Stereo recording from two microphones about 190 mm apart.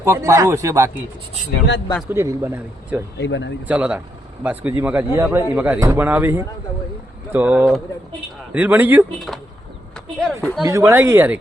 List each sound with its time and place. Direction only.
0.0 s a man's voice: 15° right (ahead or behind)
2.0 s a man's voice: 10° right (ahead or behind)
3.2 s speech: 70° left (ahead or behind)
3.7 s a man's voice: 5° right (ahead or behind)
9.9 s a sound: centre (ahead or behind)
10.6 s a man's voice: 15° right (ahead or behind)